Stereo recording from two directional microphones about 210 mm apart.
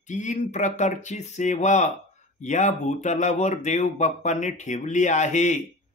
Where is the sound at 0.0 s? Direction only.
35° left (ahead or behind).